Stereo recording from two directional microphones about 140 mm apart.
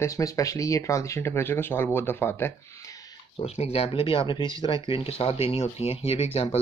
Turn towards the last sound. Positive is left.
turn(degrees=50)  # may be behind; listen again after turning